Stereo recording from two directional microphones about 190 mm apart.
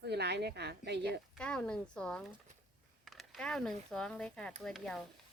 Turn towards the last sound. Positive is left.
turn(degrees=0)  # may be behind; listen again after turning